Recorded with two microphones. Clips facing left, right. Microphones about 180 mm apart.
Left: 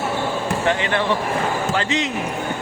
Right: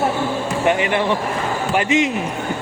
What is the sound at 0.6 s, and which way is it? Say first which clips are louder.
Speech: right 4 dB; 15° right (ahead or behind).